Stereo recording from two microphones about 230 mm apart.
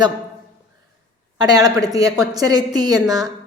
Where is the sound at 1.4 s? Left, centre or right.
Centre.